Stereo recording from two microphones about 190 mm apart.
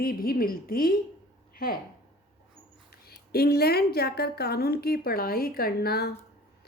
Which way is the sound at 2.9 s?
55° left (ahead or behind).